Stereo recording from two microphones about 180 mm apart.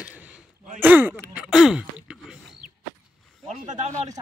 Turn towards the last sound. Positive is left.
turn(degrees=-40)  # may be behind; listen again after turning